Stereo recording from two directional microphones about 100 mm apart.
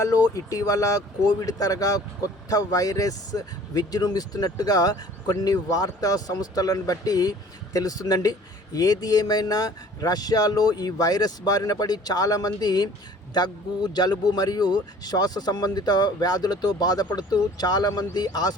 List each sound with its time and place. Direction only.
0.0 s speech: 35° left (ahead or behind)